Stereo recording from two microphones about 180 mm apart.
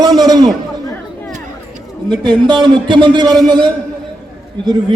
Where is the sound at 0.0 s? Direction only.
20° right (ahead or behind).